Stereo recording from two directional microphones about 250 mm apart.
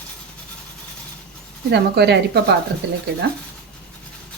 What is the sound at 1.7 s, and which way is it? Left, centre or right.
A woman's voice, right.